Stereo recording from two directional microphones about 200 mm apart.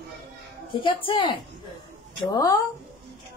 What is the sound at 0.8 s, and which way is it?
Speech, 25° left (ahead or behind).